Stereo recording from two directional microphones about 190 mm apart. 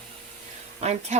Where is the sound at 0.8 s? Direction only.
35° right (ahead or behind).